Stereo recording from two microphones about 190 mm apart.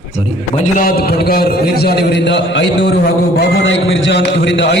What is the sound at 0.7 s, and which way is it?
A man's voice, 50° left (ahead or behind).